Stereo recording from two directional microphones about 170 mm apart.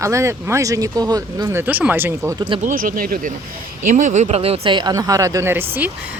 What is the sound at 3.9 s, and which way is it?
Speech, 45° right (ahead or behind).